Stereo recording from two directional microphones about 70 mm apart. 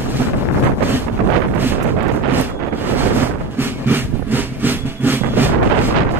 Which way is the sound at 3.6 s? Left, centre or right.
Right.